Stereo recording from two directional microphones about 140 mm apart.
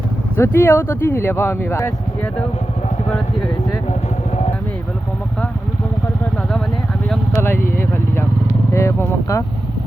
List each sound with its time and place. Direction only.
0.3 s speech: 15° left (ahead or behind)
7.3 s speech: 15° left (ahead or behind)
8.7 s speech: 20° left (ahead or behind)